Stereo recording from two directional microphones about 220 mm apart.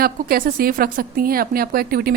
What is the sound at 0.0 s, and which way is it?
A woman's voice, 45° right (ahead or behind).